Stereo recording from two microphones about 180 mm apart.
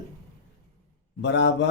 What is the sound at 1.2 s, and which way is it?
Speech, 80° left.